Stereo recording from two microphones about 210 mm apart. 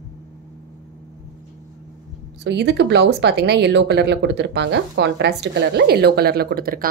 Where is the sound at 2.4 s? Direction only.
55° right (ahead or behind).